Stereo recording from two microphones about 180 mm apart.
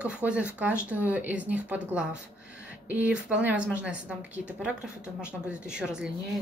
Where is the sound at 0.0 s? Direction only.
5° right (ahead or behind).